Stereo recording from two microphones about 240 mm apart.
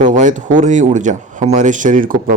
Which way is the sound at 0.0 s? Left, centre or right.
Right.